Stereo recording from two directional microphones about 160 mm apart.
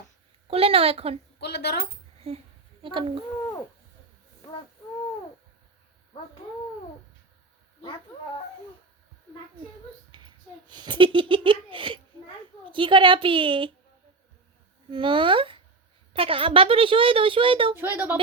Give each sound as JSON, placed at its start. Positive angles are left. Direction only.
{"t": 0.4, "sound": "speech", "side_deg": -35}
{"t": 1.4, "sound": "a woman's voice", "side_deg": 90}
{"t": 2.3, "sound": "speech", "side_deg": -40}
{"t": 10.1, "sound": "speech", "side_deg": -30}
{"t": 14.8, "sound": "speech", "side_deg": -30}
{"t": 17.7, "sound": "a woman's voice", "side_deg": -15}